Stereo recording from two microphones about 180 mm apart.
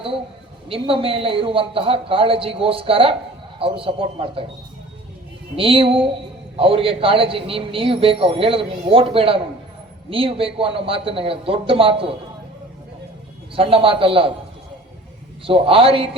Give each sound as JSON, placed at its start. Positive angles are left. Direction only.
{"t": 0.7, "sound": "a woman's voice", "side_deg": -30}
{"t": 5.5, "sound": "a woman's voice", "side_deg": -30}
{"t": 13.6, "sound": "a woman's voice", "side_deg": -30}
{"t": 15.4, "sound": "a woman's voice", "side_deg": -30}